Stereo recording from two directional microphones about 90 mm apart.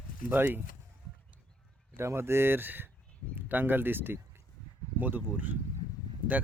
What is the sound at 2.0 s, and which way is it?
Speech, 30° right (ahead or behind).